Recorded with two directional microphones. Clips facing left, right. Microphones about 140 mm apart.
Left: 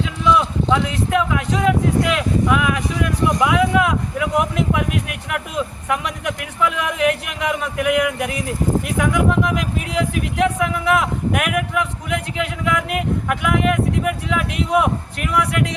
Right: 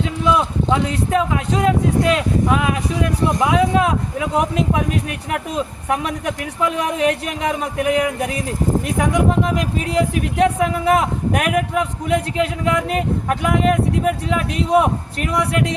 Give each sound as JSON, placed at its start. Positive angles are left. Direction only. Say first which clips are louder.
{"t": 0.0, "sound": "speech", "louder": "even", "side_deg": -35}